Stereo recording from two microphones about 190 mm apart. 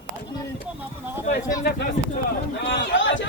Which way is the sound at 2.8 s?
75° left (ahead or behind).